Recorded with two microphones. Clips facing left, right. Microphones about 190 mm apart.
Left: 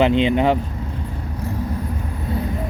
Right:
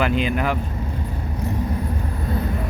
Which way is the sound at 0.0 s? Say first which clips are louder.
Left 5 dB; 25° left (ahead or behind).